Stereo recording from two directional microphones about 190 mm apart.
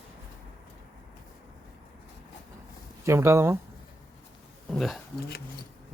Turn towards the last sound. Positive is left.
turn(degrees=55)  # may be behind; listen again after turning